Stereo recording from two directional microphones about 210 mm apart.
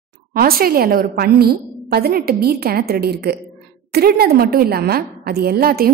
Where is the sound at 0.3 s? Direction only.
45° right (ahead or behind).